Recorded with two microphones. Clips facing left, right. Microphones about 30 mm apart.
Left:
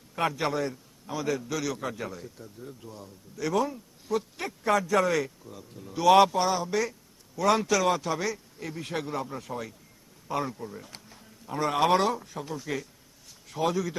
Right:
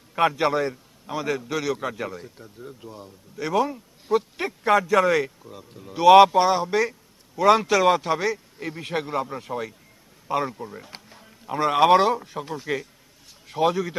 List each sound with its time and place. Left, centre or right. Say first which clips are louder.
0.2 s a man's voice: right 7 dB; right